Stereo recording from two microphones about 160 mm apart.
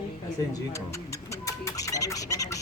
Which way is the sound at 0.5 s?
20° left (ahead or behind).